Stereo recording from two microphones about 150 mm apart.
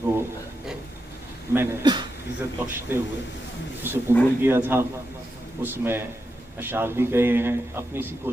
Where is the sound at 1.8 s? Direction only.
30° right (ahead or behind).